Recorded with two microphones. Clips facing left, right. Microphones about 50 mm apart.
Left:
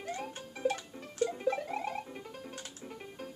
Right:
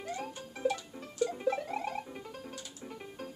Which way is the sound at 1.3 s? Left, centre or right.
Centre.